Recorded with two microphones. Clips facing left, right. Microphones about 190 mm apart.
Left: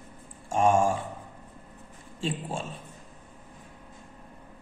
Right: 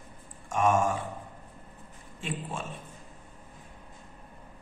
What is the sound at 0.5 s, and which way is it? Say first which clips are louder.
Speech: left 3 dB; 30° left (ahead or behind).